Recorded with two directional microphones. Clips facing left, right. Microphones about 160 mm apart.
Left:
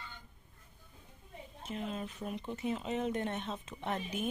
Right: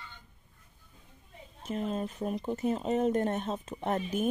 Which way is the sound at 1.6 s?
40° right (ahead or behind).